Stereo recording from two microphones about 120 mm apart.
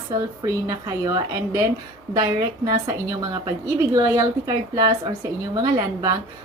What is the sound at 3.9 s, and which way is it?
A woman's voice, 30° right (ahead or behind).